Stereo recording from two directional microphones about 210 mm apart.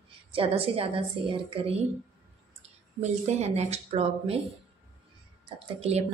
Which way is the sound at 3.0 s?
30° right (ahead or behind).